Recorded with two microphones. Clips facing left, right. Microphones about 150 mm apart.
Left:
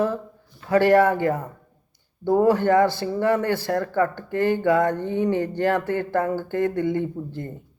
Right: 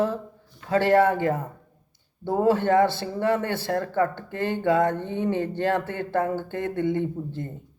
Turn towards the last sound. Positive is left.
turn(degrees=-20)  # may be behind; listen again after turning